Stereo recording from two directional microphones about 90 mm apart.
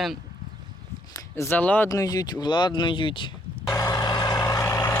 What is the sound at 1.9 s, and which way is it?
Speech, 40° left (ahead or behind).